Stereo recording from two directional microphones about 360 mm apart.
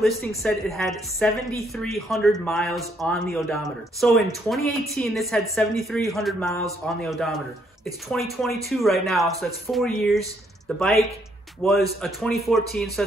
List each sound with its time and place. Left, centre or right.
0.0 s speech: centre